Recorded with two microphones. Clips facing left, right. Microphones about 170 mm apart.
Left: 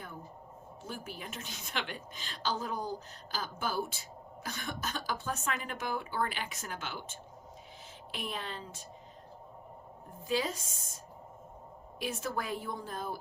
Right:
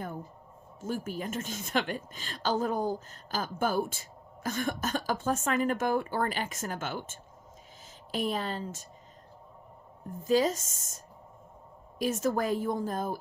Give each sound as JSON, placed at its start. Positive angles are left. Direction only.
{"t": 0.8, "sound": "a woman's voice", "side_deg": -45}
{"t": 10.2, "sound": "a woman's voice", "side_deg": -45}
{"t": 11.9, "sound": "a woman's voice", "side_deg": -45}